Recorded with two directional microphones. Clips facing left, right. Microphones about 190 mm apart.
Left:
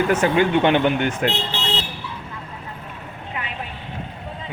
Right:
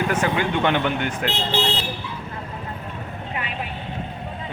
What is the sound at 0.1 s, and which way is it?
Speech, 20° left (ahead or behind).